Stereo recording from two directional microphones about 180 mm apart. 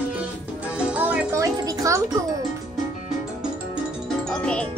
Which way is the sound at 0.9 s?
10° right (ahead or behind).